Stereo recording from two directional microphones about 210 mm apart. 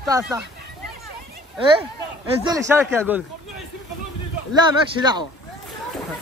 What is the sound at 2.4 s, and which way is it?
Speech, 15° right (ahead or behind).